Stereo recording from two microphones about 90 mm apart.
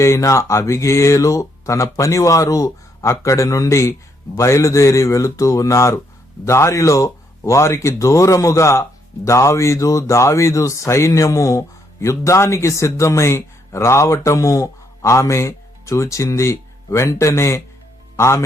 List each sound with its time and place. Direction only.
0.0 s a man's voice: 35° left (ahead or behind)